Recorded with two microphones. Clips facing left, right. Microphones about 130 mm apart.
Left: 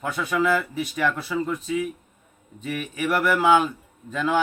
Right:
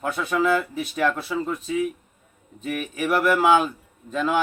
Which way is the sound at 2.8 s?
Centre (ahead or behind).